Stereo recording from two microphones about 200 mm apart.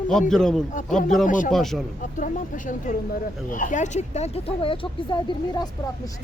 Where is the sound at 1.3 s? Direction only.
40° left (ahead or behind).